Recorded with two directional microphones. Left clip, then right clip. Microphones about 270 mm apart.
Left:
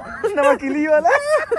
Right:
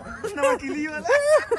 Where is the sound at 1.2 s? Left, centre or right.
Right.